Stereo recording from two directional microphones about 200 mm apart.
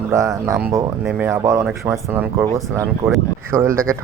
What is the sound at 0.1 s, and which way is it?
Speech, 15° right (ahead or behind).